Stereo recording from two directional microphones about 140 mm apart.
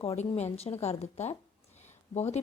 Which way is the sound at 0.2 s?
50° left (ahead or behind).